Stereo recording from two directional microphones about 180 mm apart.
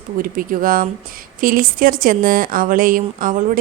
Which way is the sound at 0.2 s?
50° right (ahead or behind).